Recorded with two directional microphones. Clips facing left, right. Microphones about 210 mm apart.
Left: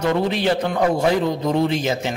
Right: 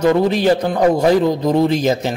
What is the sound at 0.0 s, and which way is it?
A man's voice, 40° right (ahead or behind).